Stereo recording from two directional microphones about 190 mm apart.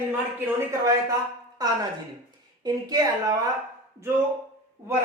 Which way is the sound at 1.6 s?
20° right (ahead or behind).